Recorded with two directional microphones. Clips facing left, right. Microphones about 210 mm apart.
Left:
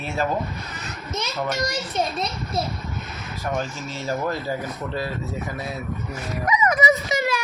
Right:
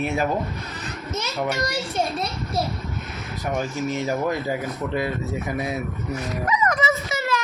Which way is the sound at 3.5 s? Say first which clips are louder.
Right 4 dB; 15° right (ahead or behind).